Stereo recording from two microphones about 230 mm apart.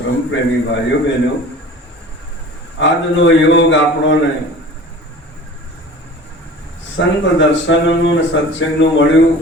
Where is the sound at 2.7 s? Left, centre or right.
Left.